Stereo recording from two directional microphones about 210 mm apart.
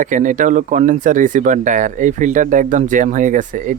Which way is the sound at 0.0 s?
35° right (ahead or behind).